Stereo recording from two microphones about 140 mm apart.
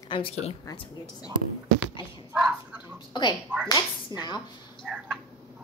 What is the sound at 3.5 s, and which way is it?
Speech, 10° right (ahead or behind).